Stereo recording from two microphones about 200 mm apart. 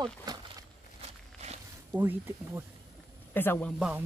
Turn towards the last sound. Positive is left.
turn(degrees=10)  # may be behind; listen again after turning